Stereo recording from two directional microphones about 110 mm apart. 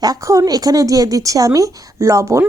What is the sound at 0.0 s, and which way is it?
Speech, 35° right (ahead or behind).